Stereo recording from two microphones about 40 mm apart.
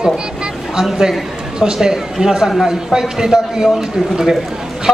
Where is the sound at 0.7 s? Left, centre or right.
Centre.